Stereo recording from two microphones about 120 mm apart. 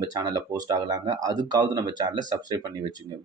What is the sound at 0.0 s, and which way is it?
A man's voice, 30° right (ahead or behind).